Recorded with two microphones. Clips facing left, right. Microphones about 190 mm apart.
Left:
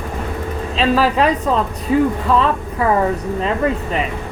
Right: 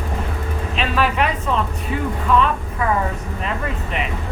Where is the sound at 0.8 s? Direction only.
35° left (ahead or behind).